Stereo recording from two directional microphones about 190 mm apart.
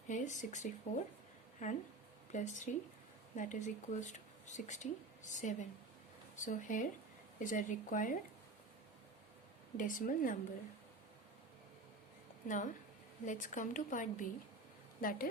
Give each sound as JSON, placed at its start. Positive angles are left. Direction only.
{"t": 0.1, "sound": "a woman's voice", "side_deg": 40}
{"t": 9.7, "sound": "a woman's voice", "side_deg": 45}
{"t": 12.5, "sound": "a woman's voice", "side_deg": 40}